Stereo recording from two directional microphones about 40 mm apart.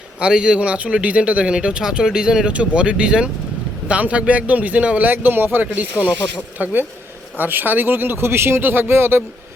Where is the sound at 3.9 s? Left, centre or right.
Right.